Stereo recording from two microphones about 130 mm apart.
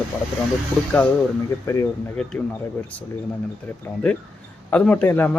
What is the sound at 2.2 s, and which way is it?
Speech, 5° left (ahead or behind).